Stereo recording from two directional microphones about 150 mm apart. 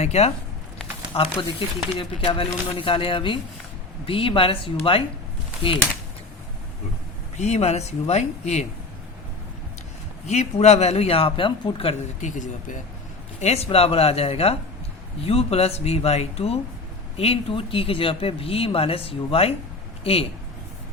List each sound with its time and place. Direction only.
0.0 s speech: 45° left (ahead or behind)
7.3 s speech: 50° left (ahead or behind)
10.2 s speech: 50° left (ahead or behind)
13.4 s speech: 45° left (ahead or behind)